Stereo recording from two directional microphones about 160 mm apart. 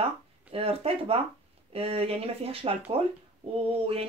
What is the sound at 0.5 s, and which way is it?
Speech, 40° right (ahead or behind).